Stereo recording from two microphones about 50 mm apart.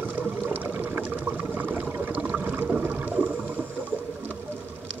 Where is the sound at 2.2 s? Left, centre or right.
Right.